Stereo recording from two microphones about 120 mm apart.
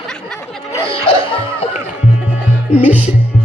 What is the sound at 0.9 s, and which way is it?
Music, 50° left (ahead or behind).